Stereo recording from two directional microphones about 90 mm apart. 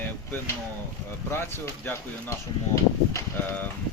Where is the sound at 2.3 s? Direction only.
35° left (ahead or behind).